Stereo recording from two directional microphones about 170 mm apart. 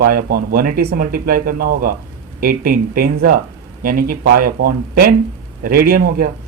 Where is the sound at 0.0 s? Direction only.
60° right (ahead or behind).